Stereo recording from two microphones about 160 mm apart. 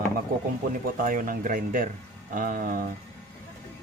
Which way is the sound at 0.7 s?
60° right (ahead or behind).